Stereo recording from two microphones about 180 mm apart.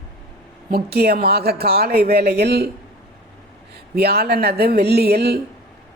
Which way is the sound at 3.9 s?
60° right (ahead or behind).